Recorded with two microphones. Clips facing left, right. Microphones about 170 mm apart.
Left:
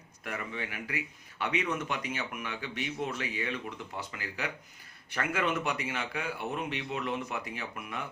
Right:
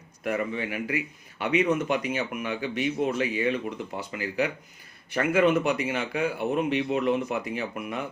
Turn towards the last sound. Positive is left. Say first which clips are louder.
# right 8 dB
turn(degrees=-20)  # may be behind; listen again after turning